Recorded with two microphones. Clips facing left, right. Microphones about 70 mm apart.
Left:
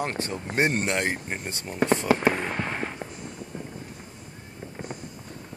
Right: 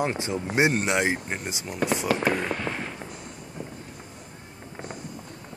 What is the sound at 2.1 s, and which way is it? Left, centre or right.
Speech, left.